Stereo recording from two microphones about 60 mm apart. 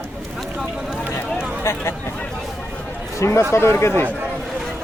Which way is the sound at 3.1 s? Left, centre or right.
Left.